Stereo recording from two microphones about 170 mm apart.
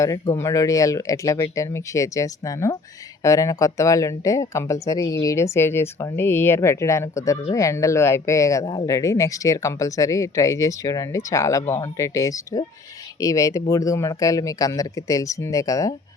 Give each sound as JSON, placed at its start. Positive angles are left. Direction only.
{"t": 0.0, "sound": "speech", "side_deg": 20}